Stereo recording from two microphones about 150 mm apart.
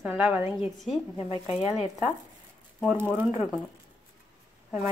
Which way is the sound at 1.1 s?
35° left (ahead or behind).